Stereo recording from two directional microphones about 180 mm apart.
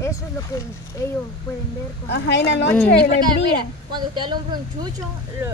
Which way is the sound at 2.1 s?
75° left (ahead or behind).